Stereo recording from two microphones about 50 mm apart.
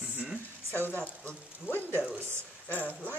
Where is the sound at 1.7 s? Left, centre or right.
Right.